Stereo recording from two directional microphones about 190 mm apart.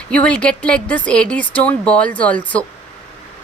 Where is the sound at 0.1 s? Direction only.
5° left (ahead or behind).